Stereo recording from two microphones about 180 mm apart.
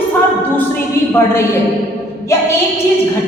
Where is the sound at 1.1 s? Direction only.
15° left (ahead or behind).